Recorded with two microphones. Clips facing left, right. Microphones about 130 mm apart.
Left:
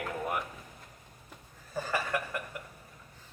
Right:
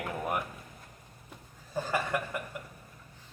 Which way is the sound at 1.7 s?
Centre (ahead or behind).